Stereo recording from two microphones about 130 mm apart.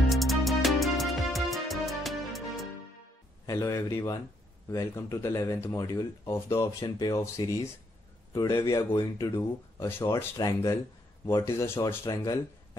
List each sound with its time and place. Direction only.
0.1 s music: centre (ahead or behind)
3.4 s speech: 25° left (ahead or behind)
10.3 s speech: 30° left (ahead or behind)